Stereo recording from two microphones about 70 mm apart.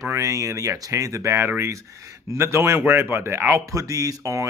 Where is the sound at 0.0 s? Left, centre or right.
Right.